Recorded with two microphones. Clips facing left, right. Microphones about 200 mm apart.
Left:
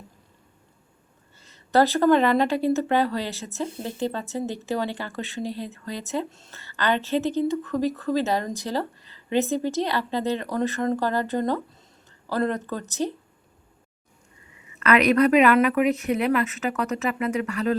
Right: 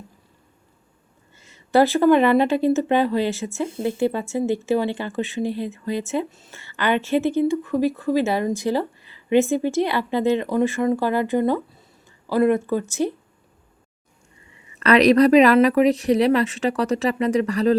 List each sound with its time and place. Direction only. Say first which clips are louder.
1.4 s speech: right 3 dB; 15° right (ahead or behind)
14.8 s speech: right 4 dB; 35° right (ahead or behind)